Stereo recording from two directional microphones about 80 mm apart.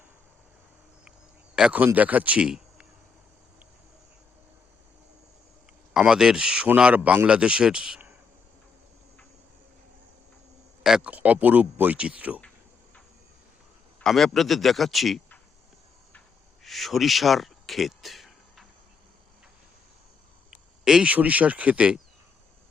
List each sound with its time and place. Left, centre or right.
1.7 s speech: right
6.0 s speech: centre
10.8 s speech: centre
14.0 s speech: centre
16.6 s a sound: centre
20.5 s speech: centre